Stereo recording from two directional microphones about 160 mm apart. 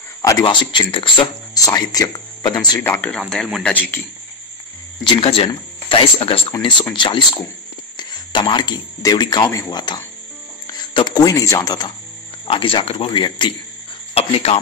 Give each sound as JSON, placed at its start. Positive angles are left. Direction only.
{"t": 0.2, "sound": "speech", "side_deg": 25}
{"t": 2.9, "sound": "speech", "side_deg": 10}
{"t": 5.0, "sound": "speech", "side_deg": 30}